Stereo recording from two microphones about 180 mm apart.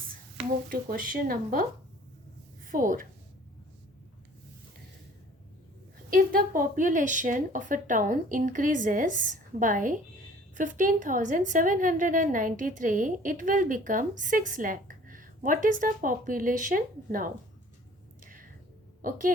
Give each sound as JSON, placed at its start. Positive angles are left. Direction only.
{"t": 0.7, "sound": "a woman's voice", "side_deg": -50}
{"t": 2.6, "sound": "a woman's voice", "side_deg": -50}
{"t": 6.1, "sound": "a woman's voice", "side_deg": -50}
{"t": 18.2, "sound": "a sound", "side_deg": -50}